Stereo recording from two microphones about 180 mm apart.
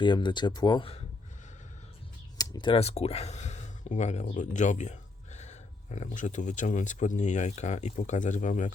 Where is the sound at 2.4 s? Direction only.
25° left (ahead or behind).